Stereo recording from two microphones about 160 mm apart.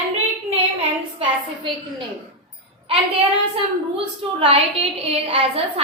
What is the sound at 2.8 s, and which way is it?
A woman's voice, 35° right (ahead or behind).